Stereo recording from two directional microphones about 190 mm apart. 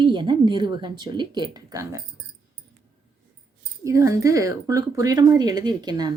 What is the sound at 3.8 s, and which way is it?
A woman's voice, 15° right (ahead or behind).